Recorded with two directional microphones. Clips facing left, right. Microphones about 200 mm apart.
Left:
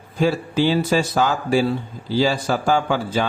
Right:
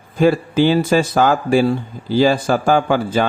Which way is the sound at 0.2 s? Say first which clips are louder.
Right 5 dB; 55° right (ahead or behind).